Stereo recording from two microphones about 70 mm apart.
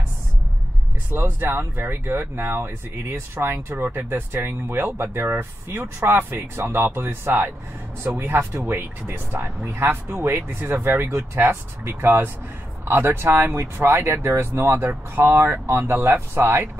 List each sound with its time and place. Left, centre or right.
1.1 s speech: right
10.0 s speech: right